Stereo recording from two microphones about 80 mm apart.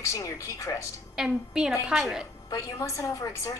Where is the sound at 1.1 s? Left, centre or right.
Centre.